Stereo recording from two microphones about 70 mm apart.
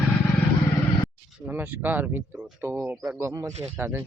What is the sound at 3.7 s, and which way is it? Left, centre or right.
Speech, right.